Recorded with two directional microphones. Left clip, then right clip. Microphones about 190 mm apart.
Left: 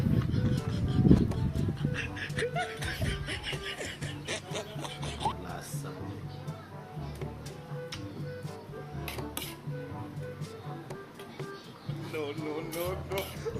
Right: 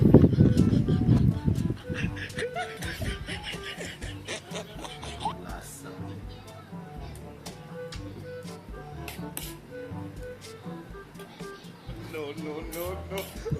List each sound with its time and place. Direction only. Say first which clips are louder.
0.2 s music: right 11 dB; centre (ahead or behind)
12.1 s music: even; centre (ahead or behind)